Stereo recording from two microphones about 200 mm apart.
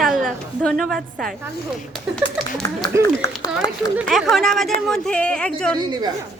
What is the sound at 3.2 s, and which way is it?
Speech, 15° left (ahead or behind).